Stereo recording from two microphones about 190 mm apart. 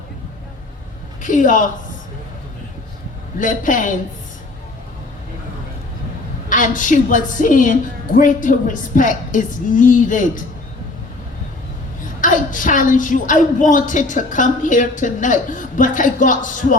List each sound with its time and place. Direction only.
1.2 s a woman's voice: 45° left (ahead or behind)
3.3 s a woman's voice: 45° left (ahead or behind)
6.5 s a woman's voice: 45° left (ahead or behind)
12.0 s a woman's voice: 45° left (ahead or behind)